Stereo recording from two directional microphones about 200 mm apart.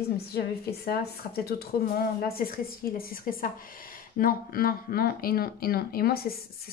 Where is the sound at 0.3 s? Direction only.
50° left (ahead or behind).